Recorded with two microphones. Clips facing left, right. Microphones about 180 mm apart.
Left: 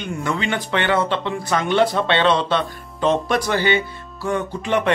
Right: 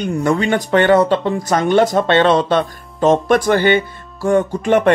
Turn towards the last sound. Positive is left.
turn(degrees=-50)  # may be behind; listen again after turning